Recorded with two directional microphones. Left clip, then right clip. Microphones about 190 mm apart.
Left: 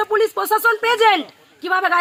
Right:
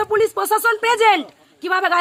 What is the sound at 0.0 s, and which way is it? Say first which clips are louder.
Speech: even; 25° right (ahead or behind).